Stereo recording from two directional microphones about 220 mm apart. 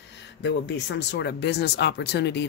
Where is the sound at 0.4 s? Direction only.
50° left (ahead or behind).